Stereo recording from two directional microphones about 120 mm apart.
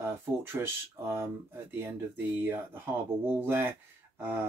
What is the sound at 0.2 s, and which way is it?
Speech, 20° right (ahead or behind).